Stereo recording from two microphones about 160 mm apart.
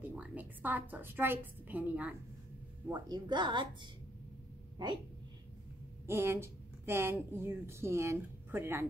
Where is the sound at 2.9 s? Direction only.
25° right (ahead or behind).